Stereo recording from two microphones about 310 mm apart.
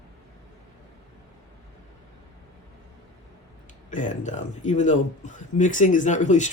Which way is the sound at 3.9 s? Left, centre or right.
Left.